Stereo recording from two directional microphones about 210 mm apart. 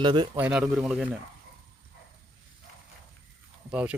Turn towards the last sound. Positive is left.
turn(degrees=-5)  # may be behind; listen again after turning